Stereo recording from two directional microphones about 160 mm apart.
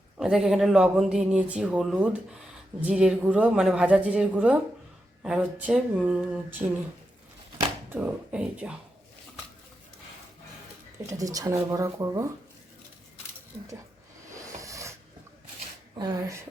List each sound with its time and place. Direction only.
0.2 s speech: 5° right (ahead or behind)
7.9 s speech: 10° right (ahead or behind)
11.0 s speech: 20° right (ahead or behind)
14.3 s a sound: 20° right (ahead or behind)
16.0 s speech: 25° right (ahead or behind)